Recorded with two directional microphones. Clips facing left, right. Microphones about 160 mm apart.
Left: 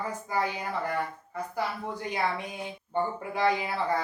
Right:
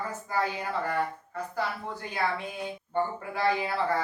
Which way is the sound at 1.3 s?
15° left (ahead or behind).